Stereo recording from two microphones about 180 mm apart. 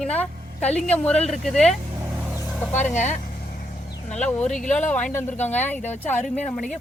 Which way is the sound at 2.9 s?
40° left (ahead or behind).